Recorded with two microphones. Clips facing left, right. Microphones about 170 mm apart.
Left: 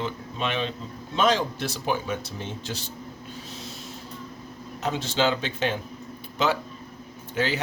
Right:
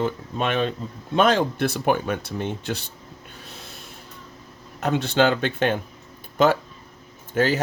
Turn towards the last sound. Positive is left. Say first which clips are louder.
# right 5 dB
turn(degrees=-45)  # may be behind; listen again after turning